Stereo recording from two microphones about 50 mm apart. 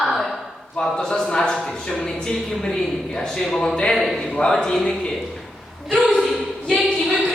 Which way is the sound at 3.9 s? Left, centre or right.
Centre.